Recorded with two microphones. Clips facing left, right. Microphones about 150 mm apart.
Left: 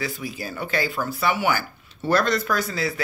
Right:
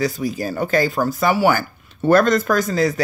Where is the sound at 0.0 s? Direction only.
40° right (ahead or behind).